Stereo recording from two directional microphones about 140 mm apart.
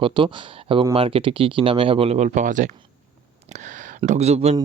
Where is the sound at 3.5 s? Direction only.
60° right (ahead or behind).